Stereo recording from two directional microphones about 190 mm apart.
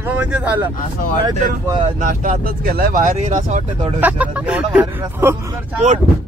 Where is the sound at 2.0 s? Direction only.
45° right (ahead or behind).